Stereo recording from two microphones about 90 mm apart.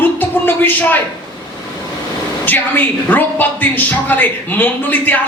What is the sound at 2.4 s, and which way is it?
Speech, 20° left (ahead or behind).